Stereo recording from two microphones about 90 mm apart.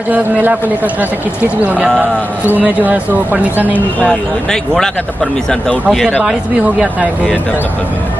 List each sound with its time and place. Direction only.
0.1 s a man's voice: 20° right (ahead or behind)
2.5 s speech: 20° right (ahead or behind)
4.1 s speech: 5° left (ahead or behind)